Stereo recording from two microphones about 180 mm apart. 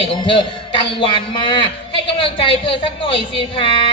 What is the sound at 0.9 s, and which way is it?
A woman's voice, 25° left (ahead or behind).